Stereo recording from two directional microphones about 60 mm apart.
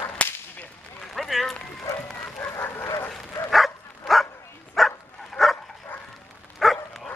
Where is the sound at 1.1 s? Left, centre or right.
Centre.